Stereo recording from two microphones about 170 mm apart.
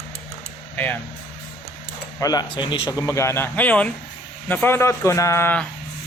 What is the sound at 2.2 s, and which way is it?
Speech, 25° left (ahead or behind).